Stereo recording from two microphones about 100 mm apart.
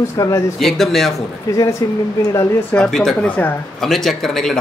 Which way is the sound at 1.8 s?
35° left (ahead or behind).